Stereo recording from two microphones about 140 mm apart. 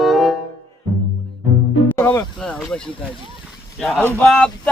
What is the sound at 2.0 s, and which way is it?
Music, 20° left (ahead or behind).